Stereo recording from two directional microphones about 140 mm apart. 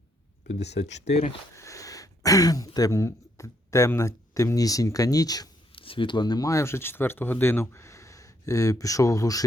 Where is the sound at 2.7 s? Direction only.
25° left (ahead or behind).